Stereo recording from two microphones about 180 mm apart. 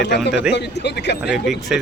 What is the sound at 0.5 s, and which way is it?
Speech, 70° left (ahead or behind).